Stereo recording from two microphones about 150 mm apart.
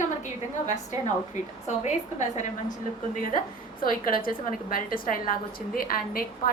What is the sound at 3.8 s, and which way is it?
A woman's voice, 70° left (ahead or behind).